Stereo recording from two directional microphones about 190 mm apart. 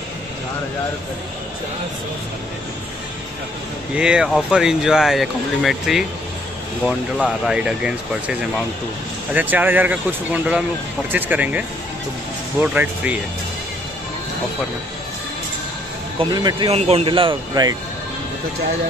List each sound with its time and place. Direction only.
3.9 s speech: 5° right (ahead or behind)
7.2 s speech: 5° right (ahead or behind)
12.6 s speech: 10° right (ahead or behind)
16.2 s speech: 25° right (ahead or behind)